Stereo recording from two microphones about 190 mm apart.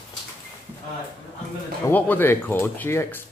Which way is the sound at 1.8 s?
10° left (ahead or behind).